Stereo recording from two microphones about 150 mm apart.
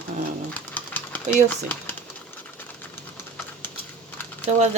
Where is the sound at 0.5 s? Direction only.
10° left (ahead or behind).